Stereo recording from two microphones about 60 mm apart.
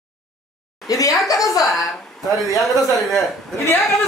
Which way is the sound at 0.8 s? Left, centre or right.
Left.